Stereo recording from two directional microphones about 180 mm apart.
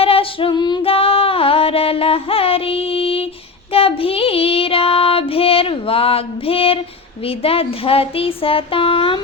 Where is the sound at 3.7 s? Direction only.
30° left (ahead or behind).